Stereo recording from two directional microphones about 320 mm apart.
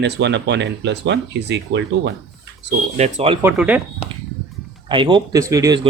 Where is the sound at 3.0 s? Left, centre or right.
Centre.